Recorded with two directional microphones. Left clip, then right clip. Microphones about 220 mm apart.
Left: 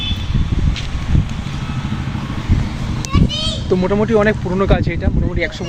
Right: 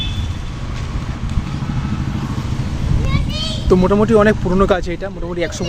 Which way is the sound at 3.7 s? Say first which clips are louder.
Right 3 dB; 15° right (ahead or behind).